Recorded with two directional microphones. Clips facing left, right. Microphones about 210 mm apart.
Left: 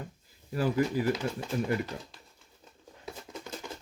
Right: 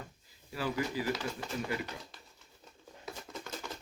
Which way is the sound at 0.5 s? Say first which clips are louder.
Left 7 dB; 50° left (ahead or behind).